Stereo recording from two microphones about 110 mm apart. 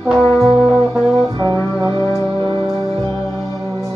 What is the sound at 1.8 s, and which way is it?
Music, 35° right (ahead or behind).